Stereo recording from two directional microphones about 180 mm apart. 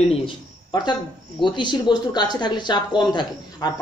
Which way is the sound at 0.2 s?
25° left (ahead or behind).